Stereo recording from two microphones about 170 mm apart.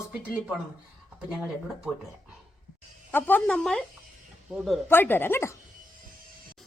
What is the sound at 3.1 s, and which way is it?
Speech, 10° left (ahead or behind).